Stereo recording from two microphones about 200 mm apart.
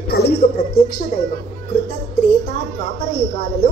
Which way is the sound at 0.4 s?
45° left (ahead or behind).